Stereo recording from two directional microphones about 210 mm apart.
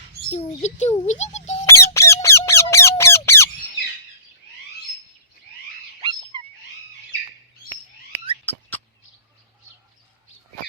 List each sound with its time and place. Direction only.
0.3 s a child's voice: 30° left (ahead or behind)
1.6 s squeak: 15° left (ahead or behind)
6.3 s wail: 25° right (ahead or behind)
8.1 s a sound: 50° right (ahead or behind)